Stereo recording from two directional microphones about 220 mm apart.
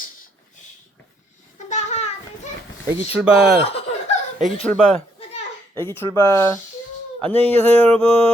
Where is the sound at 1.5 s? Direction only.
30° left (ahead or behind).